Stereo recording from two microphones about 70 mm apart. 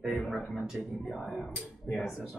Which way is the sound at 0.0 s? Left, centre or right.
Centre.